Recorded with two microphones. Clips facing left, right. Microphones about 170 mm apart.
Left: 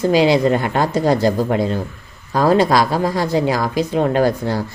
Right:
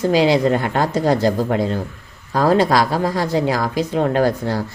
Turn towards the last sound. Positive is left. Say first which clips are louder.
# left 1 dB
turn(degrees=15)  # may be behind; listen again after turning